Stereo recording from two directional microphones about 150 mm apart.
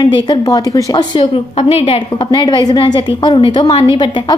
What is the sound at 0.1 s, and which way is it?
A woman's voice, 25° left (ahead or behind).